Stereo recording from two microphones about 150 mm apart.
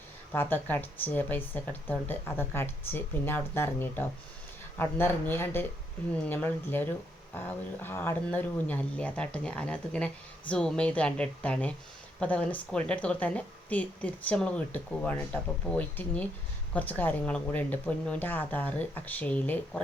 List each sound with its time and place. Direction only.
0.3 s speech: 15° left (ahead or behind)